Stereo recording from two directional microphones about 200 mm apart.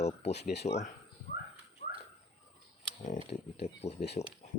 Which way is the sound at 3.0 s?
40° left (ahead or behind).